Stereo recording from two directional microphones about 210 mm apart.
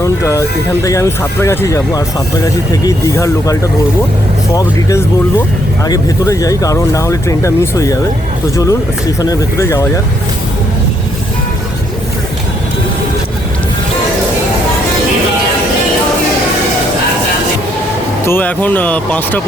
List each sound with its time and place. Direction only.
0.0 s speech: 15° left (ahead or behind)
9.2 s speech: 15° left (ahead or behind)
18.3 s speech: 10° left (ahead or behind)